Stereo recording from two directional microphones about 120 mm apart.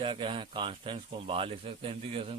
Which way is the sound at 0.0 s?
45° right (ahead or behind).